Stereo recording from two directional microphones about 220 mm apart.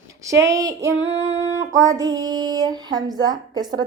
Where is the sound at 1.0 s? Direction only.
55° right (ahead or behind).